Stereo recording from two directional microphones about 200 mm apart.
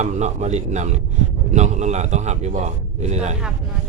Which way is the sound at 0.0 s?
35° right (ahead or behind).